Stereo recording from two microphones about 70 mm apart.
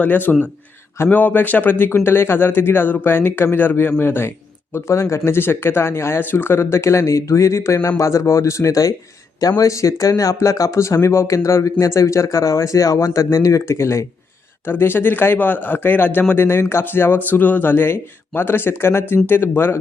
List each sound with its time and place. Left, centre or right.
0.0 s a man's voice: left
14.7 s a man's voice: left